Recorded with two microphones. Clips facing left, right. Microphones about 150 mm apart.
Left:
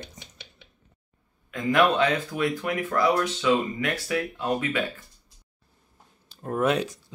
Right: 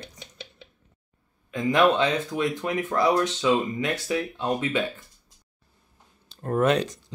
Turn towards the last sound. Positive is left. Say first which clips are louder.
# right 2 dB
turn(degrees=10)  # may be behind; listen again after turning